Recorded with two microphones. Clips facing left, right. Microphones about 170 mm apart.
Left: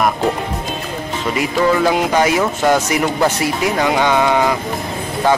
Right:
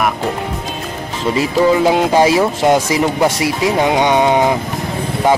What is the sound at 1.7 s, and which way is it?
A man's voice, 20° right (ahead or behind).